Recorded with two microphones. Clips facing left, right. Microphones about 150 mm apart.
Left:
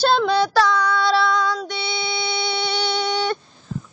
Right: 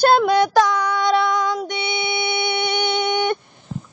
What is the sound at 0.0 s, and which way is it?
Child singing, 10° right (ahead or behind).